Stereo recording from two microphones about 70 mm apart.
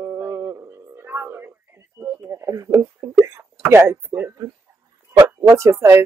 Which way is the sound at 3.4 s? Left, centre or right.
Right.